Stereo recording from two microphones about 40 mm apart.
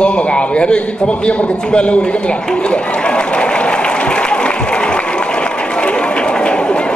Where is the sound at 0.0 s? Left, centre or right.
Left.